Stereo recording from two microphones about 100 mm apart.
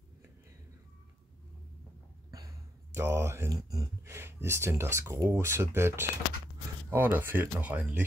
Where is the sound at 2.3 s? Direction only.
35° right (ahead or behind).